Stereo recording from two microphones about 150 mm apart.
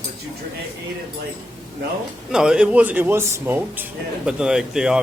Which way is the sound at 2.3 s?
5° right (ahead or behind).